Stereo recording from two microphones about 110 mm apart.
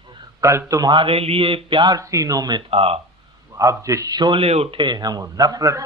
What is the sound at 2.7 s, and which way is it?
Speech, 60° right (ahead or behind).